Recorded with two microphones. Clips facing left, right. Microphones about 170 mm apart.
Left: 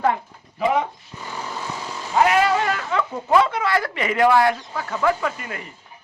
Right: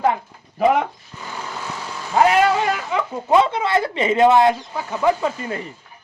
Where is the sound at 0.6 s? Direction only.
55° right (ahead or behind).